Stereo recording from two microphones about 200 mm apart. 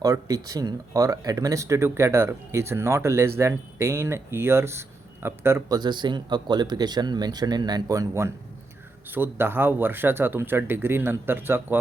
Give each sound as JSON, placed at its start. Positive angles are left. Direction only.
{"t": 0.0, "sound": "speech", "side_deg": -15}